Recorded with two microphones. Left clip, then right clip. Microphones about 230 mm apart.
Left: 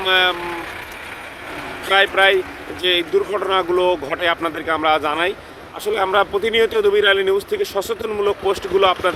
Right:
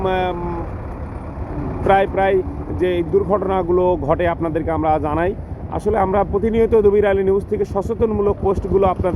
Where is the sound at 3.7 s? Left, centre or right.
Left.